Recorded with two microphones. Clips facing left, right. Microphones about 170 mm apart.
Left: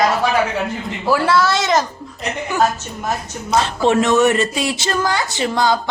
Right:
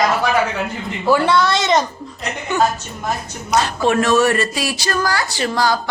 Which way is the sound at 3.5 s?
25° left (ahead or behind).